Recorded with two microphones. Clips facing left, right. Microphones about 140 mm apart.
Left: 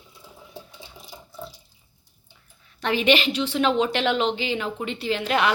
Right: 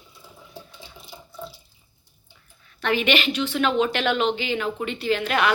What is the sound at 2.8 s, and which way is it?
A woman's voice, 30° left (ahead or behind).